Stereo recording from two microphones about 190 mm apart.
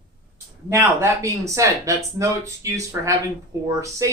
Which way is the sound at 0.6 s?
15° right (ahead or behind).